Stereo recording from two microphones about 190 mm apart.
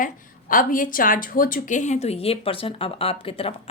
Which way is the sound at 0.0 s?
45° left (ahead or behind).